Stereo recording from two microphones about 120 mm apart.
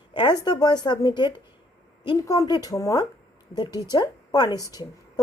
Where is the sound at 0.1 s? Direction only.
40° left (ahead or behind).